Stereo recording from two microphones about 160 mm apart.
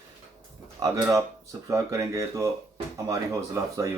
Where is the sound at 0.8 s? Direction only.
20° right (ahead or behind).